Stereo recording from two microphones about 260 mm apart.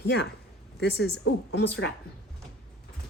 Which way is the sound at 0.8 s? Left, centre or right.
Left.